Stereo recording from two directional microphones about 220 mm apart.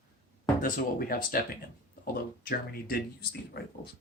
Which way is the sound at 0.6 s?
40° left (ahead or behind).